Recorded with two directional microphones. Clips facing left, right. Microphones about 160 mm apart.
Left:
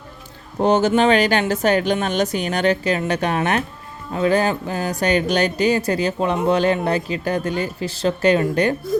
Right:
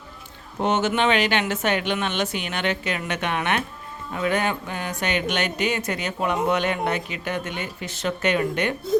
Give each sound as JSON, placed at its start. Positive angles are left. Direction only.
{"t": 0.6, "sound": "speech", "side_deg": 35}